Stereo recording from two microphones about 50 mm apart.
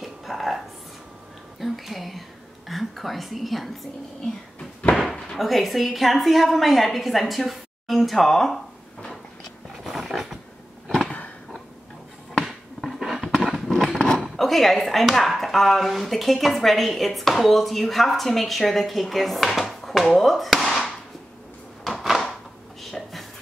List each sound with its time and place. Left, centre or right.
0.0 s music: centre
1.6 s speech: centre
4.8 s slam: centre
5.3 s speech: centre
9.8 s a sound: centre
12.4 s a sound: centre
13.7 s scissors: centre
14.0 s speech: centre
21.8 s drawer open or close: centre
22.8 s a sound: centre